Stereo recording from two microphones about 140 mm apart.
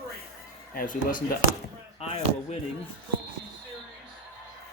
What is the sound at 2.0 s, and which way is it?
Speech, 45° left (ahead or behind).